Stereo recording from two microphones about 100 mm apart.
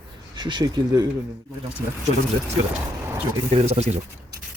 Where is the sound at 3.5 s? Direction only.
90° right.